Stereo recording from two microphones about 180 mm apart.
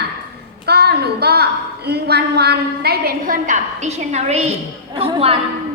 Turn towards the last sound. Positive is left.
turn(degrees=-30)  # may be behind; listen again after turning